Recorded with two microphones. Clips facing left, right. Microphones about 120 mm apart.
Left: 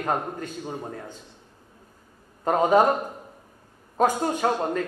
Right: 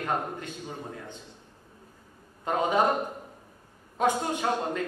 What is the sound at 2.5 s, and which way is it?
Speech, 40° left (ahead or behind).